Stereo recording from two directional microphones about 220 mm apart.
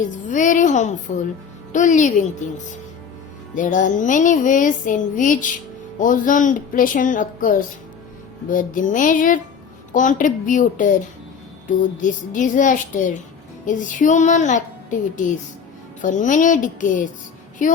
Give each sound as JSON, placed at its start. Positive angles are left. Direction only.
{"t": 0.0, "sound": "a woman's voice", "side_deg": 35}
{"t": 1.7, "sound": "music", "side_deg": 35}
{"t": 3.5, "sound": "music", "side_deg": 35}